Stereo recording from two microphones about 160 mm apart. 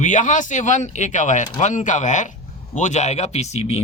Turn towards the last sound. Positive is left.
turn(degrees=40)  # may be behind; listen again after turning